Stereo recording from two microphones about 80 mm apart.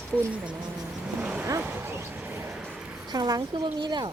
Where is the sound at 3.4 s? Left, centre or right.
Right.